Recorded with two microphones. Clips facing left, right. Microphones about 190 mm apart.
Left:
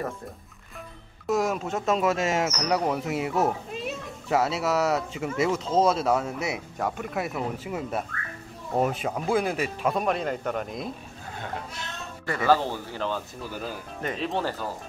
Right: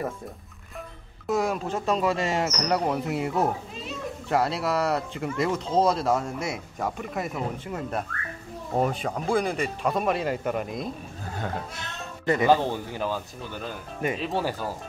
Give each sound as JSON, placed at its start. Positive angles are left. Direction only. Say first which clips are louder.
{"t": 1.2, "sound": "speech", "louder": "even", "side_deg": 0}
{"t": 12.3, "sound": "a man's voice", "louder": "right 2 dB", "side_deg": -20}
{"t": 13.4, "sound": "a man's voice", "louder": "left 1 dB", "side_deg": 5}